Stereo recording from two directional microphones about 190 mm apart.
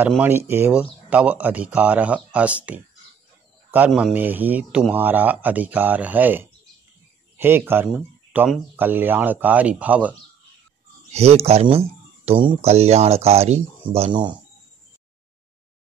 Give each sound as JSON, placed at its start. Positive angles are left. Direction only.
{"t": 0.2, "sound": "speech", "side_deg": -10}
{"t": 11.1, "sound": "speech", "side_deg": -35}